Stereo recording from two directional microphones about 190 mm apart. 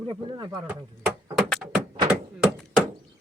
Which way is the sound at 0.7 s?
5° right (ahead or behind).